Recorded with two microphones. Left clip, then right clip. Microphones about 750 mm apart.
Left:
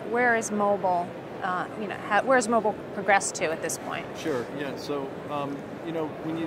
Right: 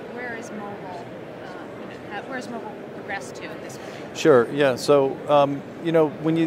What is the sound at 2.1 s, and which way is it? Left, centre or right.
Speech, left.